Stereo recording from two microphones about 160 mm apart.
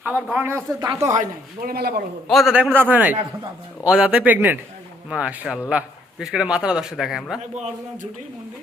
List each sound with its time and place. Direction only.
0.0 s a man's voice: 10° right (ahead or behind)
0.8 s speech: 20° right (ahead or behind)
1.1 s speech: 55° right (ahead or behind)
1.7 s a man's voice: 75° right (ahead or behind)
2.2 s a man's voice: centre (ahead or behind)